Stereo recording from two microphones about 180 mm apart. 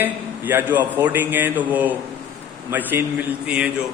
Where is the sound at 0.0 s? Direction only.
10° right (ahead or behind).